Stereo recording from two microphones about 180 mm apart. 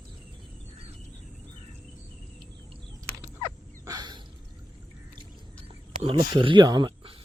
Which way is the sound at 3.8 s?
25° right (ahead or behind).